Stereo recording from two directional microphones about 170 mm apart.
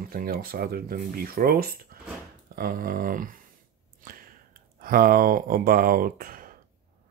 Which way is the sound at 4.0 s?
55° right (ahead or behind).